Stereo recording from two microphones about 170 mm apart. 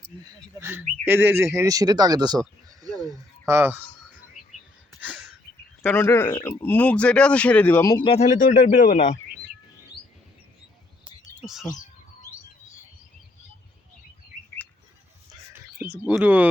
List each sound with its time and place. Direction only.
0.6 s speech: 10° right (ahead or behind)
2.6 s a sound: 20° right (ahead or behind)
5.0 s a sound: centre (ahead or behind)
5.8 s speech: 10° left (ahead or behind)
8.0 s a man's voice: 40° left (ahead or behind)
11.0 s bird: 5° right (ahead or behind)
16.0 s speech: 10° right (ahead or behind)